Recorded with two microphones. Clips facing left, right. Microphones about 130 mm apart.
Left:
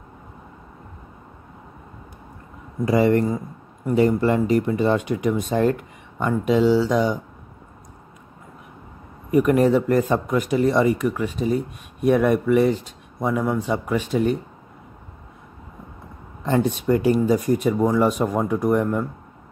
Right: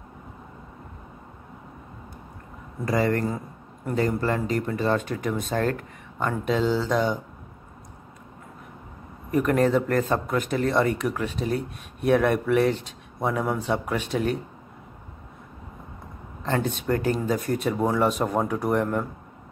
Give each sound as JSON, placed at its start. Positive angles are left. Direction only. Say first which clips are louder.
{"t": 2.8, "sound": "speech", "louder": "left 6 dB", "side_deg": 20}
{"t": 3.3, "sound": "a sound", "louder": "left 5 dB", "side_deg": 5}
{"t": 4.0, "sound": "speech", "louder": "left 6 dB", "side_deg": 20}
{"t": 9.3, "sound": "speech", "louder": "left 4 dB", "side_deg": 10}
{"t": 16.4, "sound": "speech", "louder": "left 5 dB", "side_deg": 10}
{"t": 17.5, "sound": "speech", "louder": "left 5 dB", "side_deg": 0}